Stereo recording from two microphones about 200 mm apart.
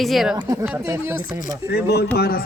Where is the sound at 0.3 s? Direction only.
20° right (ahead or behind).